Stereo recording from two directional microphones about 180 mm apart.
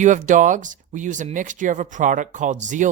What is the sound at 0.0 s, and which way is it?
Speech, 45° right (ahead or behind).